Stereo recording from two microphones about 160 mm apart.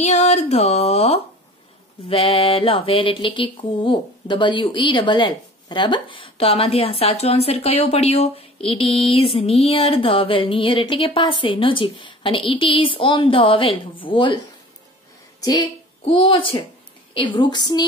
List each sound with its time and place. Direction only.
0.0 s a sound: 45° left (ahead or behind)
2.0 s mantra: 35° left (ahead or behind)
16.1 s mantra: 30° left (ahead or behind)
17.1 s a woman's voice: 30° left (ahead or behind)